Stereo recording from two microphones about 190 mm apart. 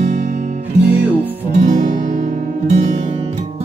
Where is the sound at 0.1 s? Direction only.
40° right (ahead or behind).